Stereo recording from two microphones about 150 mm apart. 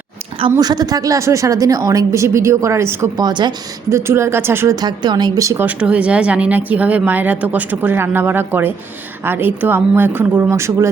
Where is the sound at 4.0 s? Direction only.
15° right (ahead or behind).